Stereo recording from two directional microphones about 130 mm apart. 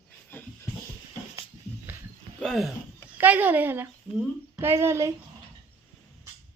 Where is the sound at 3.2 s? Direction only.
15° right (ahead or behind).